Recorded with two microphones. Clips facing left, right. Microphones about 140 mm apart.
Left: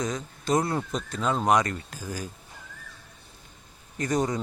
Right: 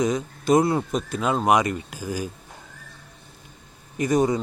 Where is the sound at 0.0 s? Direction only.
10° right (ahead or behind).